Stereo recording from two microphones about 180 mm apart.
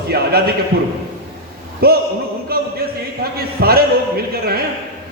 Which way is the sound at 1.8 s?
60° right (ahead or behind).